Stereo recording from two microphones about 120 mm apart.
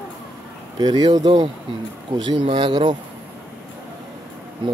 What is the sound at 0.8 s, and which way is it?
Speech, 35° right (ahead or behind).